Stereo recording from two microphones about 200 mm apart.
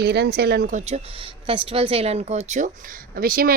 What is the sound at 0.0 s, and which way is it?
A woman's voice, 55° right (ahead or behind).